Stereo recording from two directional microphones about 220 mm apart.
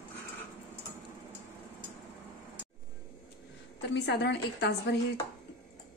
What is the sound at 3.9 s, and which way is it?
A woman's voice, 50° left (ahead or behind).